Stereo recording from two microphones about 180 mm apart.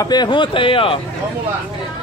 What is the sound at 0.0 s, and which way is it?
Speech, 25° left (ahead or behind).